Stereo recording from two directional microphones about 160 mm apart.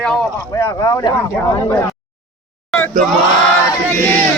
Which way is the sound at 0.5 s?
20° left (ahead or behind).